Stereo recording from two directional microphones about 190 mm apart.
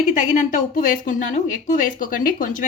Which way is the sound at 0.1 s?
40° left (ahead or behind).